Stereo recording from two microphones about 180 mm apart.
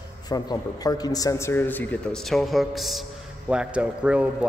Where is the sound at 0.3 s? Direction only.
20° left (ahead or behind).